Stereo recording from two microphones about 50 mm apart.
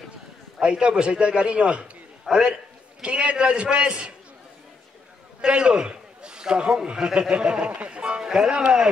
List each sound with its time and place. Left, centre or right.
0.6 s a man's voice: centre
2.2 s a man's voice: centre
3.0 s a man's voice: right
5.4 s a man's voice: centre